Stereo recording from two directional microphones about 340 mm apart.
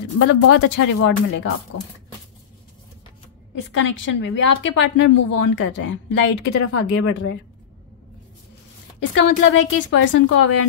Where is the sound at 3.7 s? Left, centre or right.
Left.